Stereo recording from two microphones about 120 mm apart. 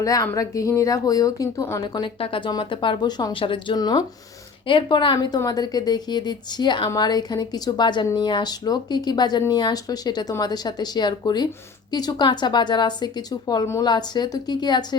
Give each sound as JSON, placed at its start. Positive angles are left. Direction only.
{"t": 0.0, "sound": "a woman's voice", "side_deg": 30}
{"t": 2.1, "sound": "a woman's voice", "side_deg": 50}